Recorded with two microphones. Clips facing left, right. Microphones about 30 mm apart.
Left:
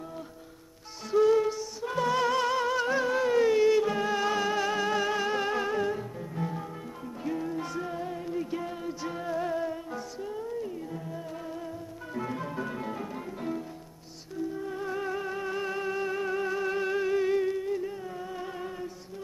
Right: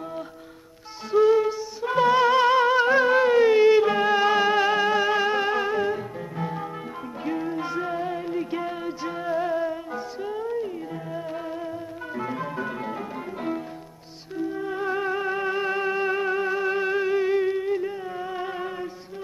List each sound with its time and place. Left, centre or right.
1.1 s music: centre
10.2 s music: right
12.2 s music: right
14.3 s music: right